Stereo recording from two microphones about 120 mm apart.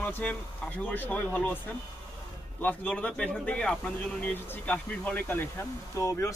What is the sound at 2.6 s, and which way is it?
Speech, 15° left (ahead or behind).